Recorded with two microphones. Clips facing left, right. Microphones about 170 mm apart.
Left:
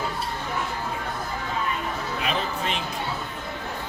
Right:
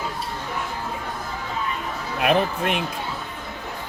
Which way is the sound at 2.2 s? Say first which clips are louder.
Right 9 dB; 60° right (ahead or behind).